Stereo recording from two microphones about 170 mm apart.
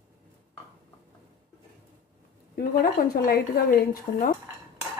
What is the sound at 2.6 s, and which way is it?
Speech, 60° left (ahead or behind).